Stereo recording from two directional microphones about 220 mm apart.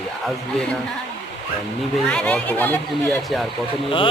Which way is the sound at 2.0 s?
5° left (ahead or behind).